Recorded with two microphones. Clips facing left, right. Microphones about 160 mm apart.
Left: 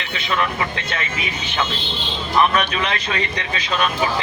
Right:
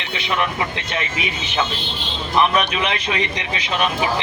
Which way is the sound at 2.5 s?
20° right (ahead or behind).